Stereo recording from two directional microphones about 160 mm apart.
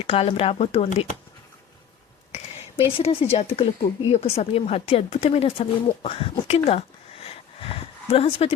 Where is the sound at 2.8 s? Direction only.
40° left (ahead or behind).